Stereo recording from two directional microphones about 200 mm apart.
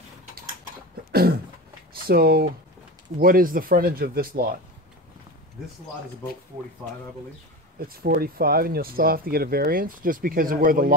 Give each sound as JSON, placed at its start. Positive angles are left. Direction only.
{"t": 2.0, "sound": "speech", "side_deg": -50}
{"t": 7.9, "sound": "speech", "side_deg": -50}